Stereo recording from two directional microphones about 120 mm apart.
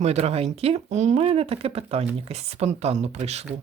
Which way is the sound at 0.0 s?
60° right (ahead or behind).